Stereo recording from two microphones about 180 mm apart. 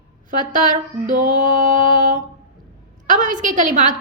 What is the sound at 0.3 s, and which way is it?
A woman's voice, 45° right (ahead or behind).